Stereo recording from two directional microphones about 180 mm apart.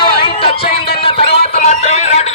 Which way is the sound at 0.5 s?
60° left (ahead or behind).